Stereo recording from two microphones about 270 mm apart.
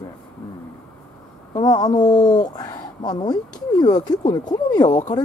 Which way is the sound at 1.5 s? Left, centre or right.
Centre.